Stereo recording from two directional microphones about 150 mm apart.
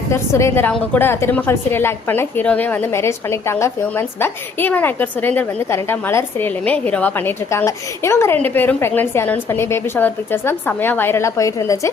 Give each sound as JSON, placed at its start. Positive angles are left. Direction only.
{"t": 0.1, "sound": "a woman's voice", "side_deg": 20}